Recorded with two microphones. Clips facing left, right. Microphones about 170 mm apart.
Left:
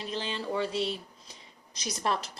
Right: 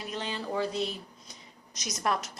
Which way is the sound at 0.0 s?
30° left (ahead or behind).